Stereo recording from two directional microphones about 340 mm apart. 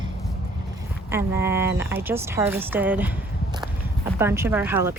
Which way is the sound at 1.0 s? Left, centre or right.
Centre.